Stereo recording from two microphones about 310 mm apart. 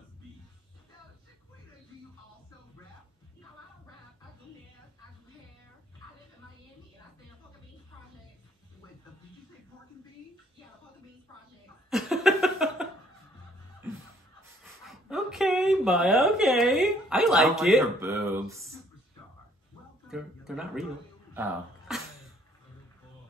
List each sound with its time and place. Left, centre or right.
11.9 s laughter: centre
14.6 s speech: centre
20.1 s speech: centre
21.3 s a sound: centre